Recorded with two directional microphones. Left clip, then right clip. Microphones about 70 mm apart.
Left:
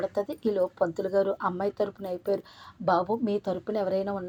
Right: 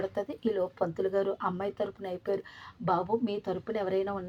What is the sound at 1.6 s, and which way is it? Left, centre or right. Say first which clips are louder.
Speech: left 4 dB; left.